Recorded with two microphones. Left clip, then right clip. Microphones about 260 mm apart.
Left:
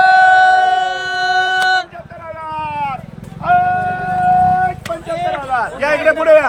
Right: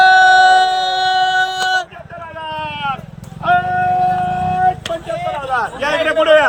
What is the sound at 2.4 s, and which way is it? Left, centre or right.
Vehicle, left.